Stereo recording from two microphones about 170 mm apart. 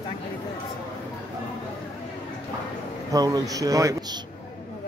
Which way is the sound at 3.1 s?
20° right (ahead or behind).